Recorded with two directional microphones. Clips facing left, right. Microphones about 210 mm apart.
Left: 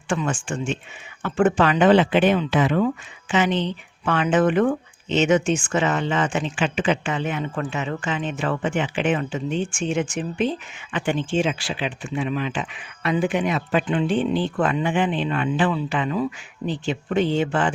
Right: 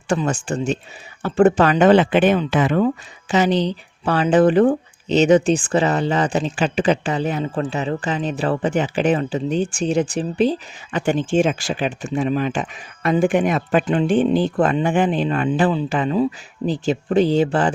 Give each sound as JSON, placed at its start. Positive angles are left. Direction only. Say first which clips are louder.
{"t": 0.1, "sound": "speech", "louder": "right 4 dB", "side_deg": -40}